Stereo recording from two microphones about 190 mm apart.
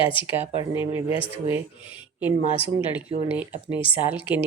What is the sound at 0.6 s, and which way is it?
Speech, 15° right (ahead or behind).